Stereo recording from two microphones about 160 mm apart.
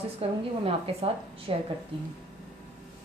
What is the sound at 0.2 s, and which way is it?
A woman's voice, 35° right (ahead or behind).